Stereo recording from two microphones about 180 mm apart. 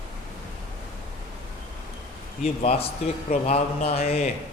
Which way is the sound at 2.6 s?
35° left (ahead or behind).